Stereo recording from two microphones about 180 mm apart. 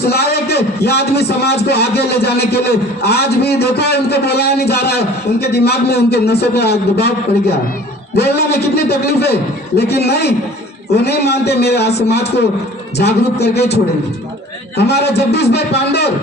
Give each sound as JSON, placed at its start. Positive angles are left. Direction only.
{"t": 0.1, "sound": "a man's voice", "side_deg": 60}
{"t": 14.8, "sound": "a man's voice", "side_deg": 65}